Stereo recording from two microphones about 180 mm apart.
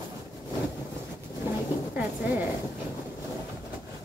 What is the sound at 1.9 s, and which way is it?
Speech, 10° right (ahead or behind).